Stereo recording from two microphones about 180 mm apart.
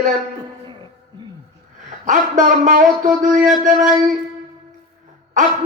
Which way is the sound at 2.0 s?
45° right (ahead or behind).